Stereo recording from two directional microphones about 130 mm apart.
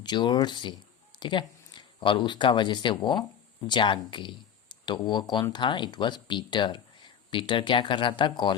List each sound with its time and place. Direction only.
0.0 s speech: 35° left (ahead or behind)